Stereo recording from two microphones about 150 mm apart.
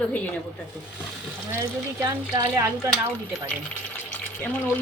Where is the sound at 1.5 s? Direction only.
20° right (ahead or behind).